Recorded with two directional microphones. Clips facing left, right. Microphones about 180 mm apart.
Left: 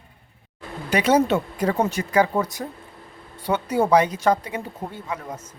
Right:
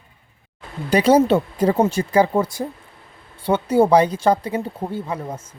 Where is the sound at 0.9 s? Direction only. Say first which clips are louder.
Right 4 dB; 30° right (ahead or behind).